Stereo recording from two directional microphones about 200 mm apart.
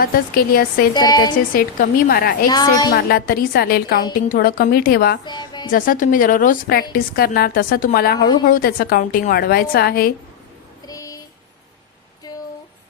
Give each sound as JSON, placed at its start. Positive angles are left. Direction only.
{"t": 0.0, "sound": "a woman's voice", "side_deg": 45}
{"t": 0.9, "sound": "a woman's voice", "side_deg": 20}
{"t": 1.5, "sound": "a woman's voice", "side_deg": 50}
{"t": 2.5, "sound": "a woman's voice", "side_deg": 20}
{"t": 2.9, "sound": "a woman's voice", "side_deg": 50}
{"t": 5.2, "sound": "speech", "side_deg": 20}
{"t": 5.7, "sound": "a woman's voice", "side_deg": 45}
{"t": 10.8, "sound": "a sound", "side_deg": 15}